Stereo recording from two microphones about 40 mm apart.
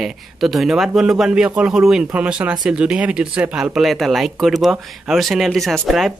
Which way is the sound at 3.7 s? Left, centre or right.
Centre.